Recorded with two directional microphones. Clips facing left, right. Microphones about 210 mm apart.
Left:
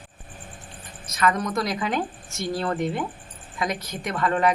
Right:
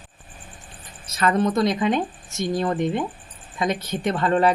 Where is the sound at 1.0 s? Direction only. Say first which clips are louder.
Right 3 dB; 30° right (ahead or behind).